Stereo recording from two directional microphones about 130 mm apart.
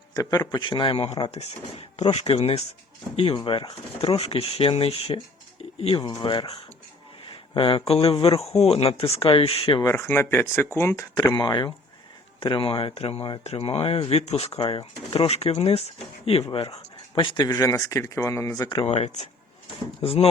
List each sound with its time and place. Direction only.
0.1 s speech: 30° left (ahead or behind); by 6.1 s 45° left (ahead or behind)
6.1 s speech: 35° left (ahead or behind)
9.8 s speech: 20° left (ahead or behind)
11.3 s speech: 35° left (ahead or behind); by 16.7 s 50° left (ahead or behind)
17.2 s speech: 35° left (ahead or behind)
18.6 s speech: 35° left (ahead or behind)
18.9 s speech: 55° left (ahead or behind)
20.0 s speech: 45° left (ahead or behind)